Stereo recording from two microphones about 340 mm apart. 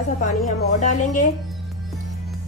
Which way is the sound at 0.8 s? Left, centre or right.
Left.